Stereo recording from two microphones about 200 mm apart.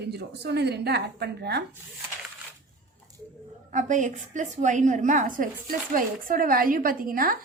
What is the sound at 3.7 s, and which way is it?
A woman's voice, 40° right (ahead or behind).